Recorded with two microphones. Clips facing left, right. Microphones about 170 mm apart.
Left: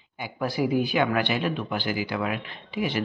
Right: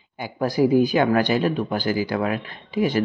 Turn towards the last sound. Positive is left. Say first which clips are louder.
# right 6 dB
turn(degrees=-45)  # may be behind; listen again after turning